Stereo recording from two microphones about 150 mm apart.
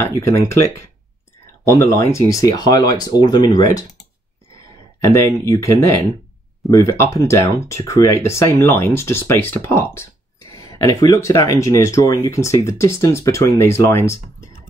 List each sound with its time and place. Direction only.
0.0 s speech: 20° left (ahead or behind)
1.4 s a sound: 20° left (ahead or behind)
2.0 s speech: 20° left (ahead or behind)
5.0 s speech: 20° left (ahead or behind)